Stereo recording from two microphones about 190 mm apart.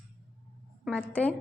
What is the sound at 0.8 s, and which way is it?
Speech, 5° left (ahead or behind).